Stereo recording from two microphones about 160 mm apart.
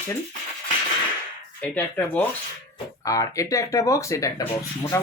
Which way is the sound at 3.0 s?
20° left (ahead or behind).